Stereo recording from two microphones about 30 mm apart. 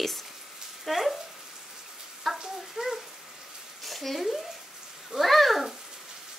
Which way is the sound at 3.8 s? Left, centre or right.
Centre.